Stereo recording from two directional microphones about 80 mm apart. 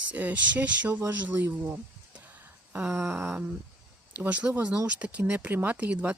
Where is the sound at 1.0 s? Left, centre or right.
Right.